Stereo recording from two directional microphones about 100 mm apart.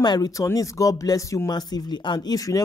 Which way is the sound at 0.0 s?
40° left (ahead or behind).